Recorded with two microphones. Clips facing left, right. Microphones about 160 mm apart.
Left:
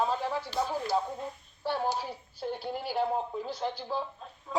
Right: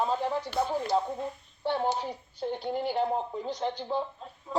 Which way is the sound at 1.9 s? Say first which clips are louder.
Right 2 dB; 5° left (ahead or behind).